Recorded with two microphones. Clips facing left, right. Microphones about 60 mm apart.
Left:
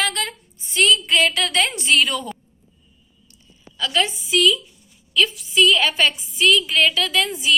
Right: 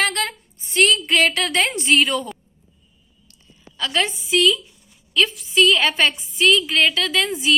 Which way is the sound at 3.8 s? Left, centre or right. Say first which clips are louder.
Left 1 dB; right.